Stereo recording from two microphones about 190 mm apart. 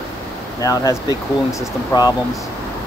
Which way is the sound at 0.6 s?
20° left (ahead or behind).